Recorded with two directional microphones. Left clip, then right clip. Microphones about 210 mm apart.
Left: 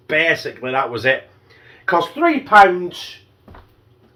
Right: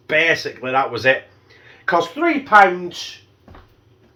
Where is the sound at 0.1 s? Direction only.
10° right (ahead or behind).